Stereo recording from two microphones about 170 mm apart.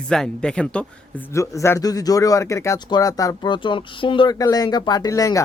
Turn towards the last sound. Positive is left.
turn(degrees=20)  # may be behind; listen again after turning